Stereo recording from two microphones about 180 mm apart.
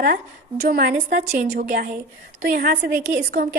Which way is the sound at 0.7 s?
60° right (ahead or behind).